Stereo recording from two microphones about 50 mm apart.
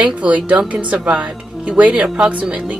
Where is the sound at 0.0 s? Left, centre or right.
Right.